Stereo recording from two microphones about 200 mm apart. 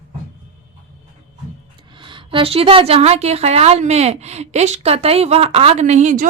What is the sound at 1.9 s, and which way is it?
A woman's voice, 25° right (ahead or behind).